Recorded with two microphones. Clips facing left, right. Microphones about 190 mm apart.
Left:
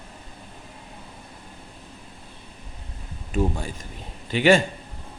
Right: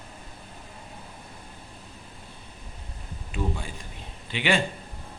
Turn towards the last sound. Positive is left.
turn(degrees=45)  # may be behind; listen again after turning